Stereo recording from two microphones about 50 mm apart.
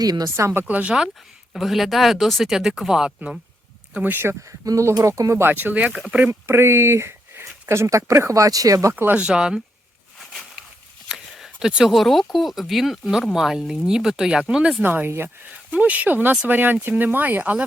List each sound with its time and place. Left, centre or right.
0.3 s speech: right
0.9 s speech: centre
1.5 s speech: centre
4.0 s speech: right
4.8 s speech: right
5.5 s speech: right
6.1 s speech: right
6.4 s speech: right
9.1 s speech: centre
11.3 s a sound: centre
11.9 s speech: centre
14.8 s speech: right
15.0 s speech: right
15.8 s speech: right